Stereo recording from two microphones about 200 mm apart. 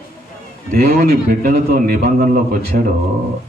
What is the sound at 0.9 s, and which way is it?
Speech, 50° right (ahead or behind).